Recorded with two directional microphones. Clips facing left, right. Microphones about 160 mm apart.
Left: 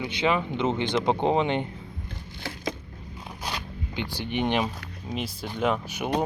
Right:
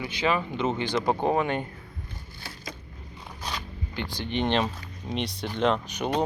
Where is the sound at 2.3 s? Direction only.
90° left.